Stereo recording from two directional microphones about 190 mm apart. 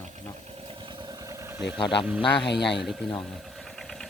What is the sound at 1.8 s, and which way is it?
Speech, 25° left (ahead or behind).